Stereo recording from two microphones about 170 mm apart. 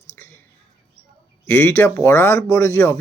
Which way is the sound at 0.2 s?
15° left (ahead or behind).